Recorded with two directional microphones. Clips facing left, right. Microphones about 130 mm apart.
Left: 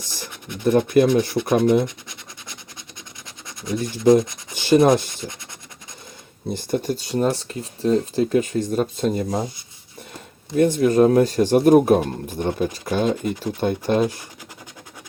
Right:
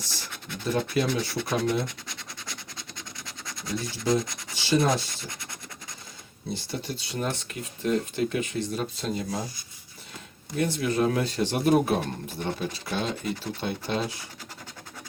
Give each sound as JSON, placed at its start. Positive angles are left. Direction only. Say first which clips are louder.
{"t": 0.0, "sound": "speech", "louder": "left 4 dB", "side_deg": 20}
{"t": 0.6, "sound": "speech", "louder": "left 10 dB", "side_deg": 55}
{"t": 3.4, "sound": "speech", "louder": "left 7 dB", "side_deg": 20}
{"t": 4.5, "sound": "rub", "louder": "left 9 dB", "side_deg": 50}
{"t": 6.5, "sound": "speech", "louder": "left 10 dB", "side_deg": 45}
{"t": 10.6, "sound": "speech", "louder": "left 10 dB", "side_deg": 45}